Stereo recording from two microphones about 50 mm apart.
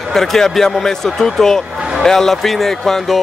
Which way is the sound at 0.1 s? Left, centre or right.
Centre.